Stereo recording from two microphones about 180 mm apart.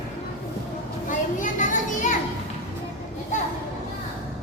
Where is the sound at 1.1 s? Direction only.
45° left (ahead or behind).